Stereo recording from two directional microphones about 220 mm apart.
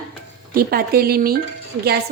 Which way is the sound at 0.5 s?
45° right (ahead or behind).